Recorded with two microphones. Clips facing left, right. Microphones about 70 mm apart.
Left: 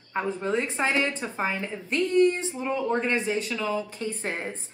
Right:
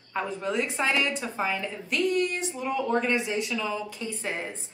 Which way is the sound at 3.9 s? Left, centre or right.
Left.